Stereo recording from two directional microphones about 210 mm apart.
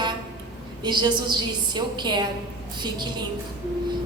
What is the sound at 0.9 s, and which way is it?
A woman's voice, 20° right (ahead or behind).